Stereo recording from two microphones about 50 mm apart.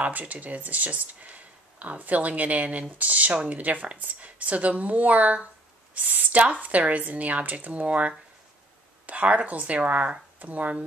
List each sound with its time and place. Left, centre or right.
0.0 s speech: right